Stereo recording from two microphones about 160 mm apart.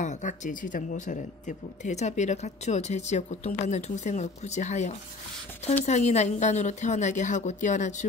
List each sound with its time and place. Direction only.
0.0 s speech: 50° left (ahead or behind)